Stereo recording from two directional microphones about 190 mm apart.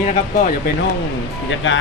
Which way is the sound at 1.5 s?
75° left (ahead or behind).